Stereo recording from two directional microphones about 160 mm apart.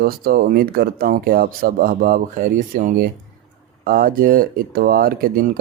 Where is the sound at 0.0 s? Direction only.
65° right (ahead or behind).